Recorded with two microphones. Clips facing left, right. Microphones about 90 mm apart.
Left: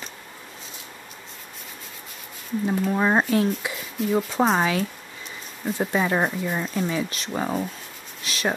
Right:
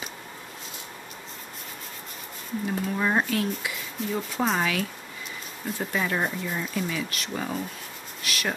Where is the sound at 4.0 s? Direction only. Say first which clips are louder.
Left 6 dB; centre (ahead or behind).